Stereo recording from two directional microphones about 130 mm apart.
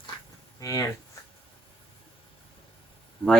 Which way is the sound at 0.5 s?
25° left (ahead or behind).